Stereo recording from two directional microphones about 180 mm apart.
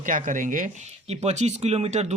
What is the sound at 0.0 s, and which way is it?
Speech, 45° right (ahead or behind).